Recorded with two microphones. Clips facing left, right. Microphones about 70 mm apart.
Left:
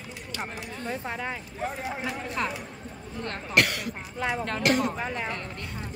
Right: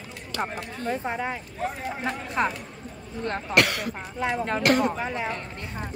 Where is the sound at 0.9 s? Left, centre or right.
Right.